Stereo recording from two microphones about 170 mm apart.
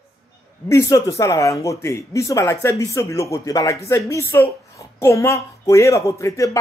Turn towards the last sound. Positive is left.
turn(degrees=15)  # may be behind; listen again after turning